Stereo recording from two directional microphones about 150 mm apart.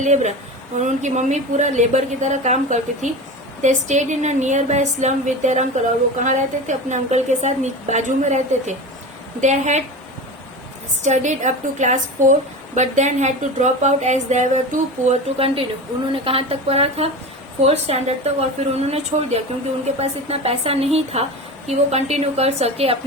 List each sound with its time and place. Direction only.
0.0 s a woman's voice: 50° right (ahead or behind)
11.0 s a woman's voice: 50° right (ahead or behind)